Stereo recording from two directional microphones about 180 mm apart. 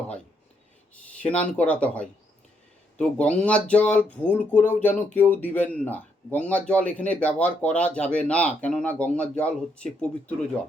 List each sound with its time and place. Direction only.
1.2 s speech: 10° left (ahead or behind)